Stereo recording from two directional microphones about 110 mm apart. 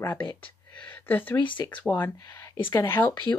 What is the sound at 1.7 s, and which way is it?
A woman's voice, 15° left (ahead or behind).